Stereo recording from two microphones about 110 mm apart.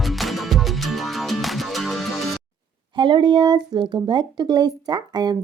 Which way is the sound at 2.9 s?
45° right (ahead or behind).